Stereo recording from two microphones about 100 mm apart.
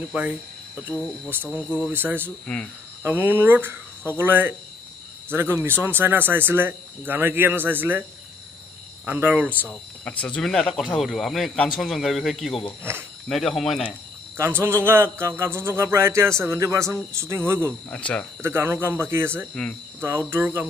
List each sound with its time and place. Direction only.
0.1 s a man's voice: 15° right (ahead or behind)
2.2 s speech: 10° left (ahead or behind)
3.0 s a man's voice: 20° right (ahead or behind)
9.0 s speech: 15° right (ahead or behind)
9.5 s speech: 15° left (ahead or behind)
10.4 s a man's voice: 5° left (ahead or behind)
12.9 s a man's voice: 25° right (ahead or behind)
13.3 s a man's voice: centre (ahead or behind)
14.3 s a man's voice: 25° right (ahead or behind)
17.8 s speech: 15° left (ahead or behind)
18.4 s a man's voice: 25° right (ahead or behind)